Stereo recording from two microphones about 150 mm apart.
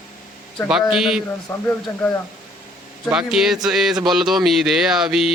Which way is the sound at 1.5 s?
15° left (ahead or behind).